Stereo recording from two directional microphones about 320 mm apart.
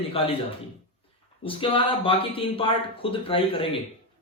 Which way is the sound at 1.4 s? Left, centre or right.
Centre.